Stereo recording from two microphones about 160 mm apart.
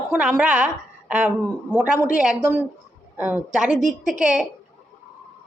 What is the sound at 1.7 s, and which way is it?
A woman's voice, 10° right (ahead or behind).